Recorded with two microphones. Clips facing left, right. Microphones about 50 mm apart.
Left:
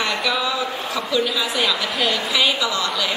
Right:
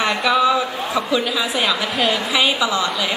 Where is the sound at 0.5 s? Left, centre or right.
Centre.